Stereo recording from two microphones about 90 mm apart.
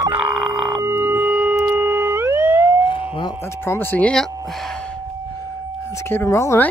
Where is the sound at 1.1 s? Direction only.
20° right (ahead or behind).